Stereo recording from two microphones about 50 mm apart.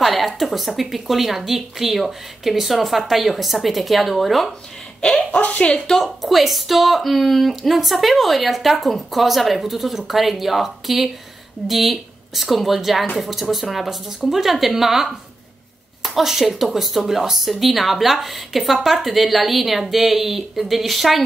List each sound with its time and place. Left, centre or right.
0.0 s a sound: centre
0.4 s a woman's voice: centre
5.3 s a woman's voice: left
5.7 s speech: centre